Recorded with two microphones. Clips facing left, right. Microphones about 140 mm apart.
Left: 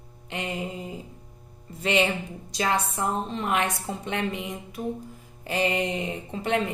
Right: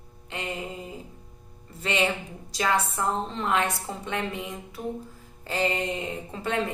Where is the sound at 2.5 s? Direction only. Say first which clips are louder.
Even; 25° left (ahead or behind).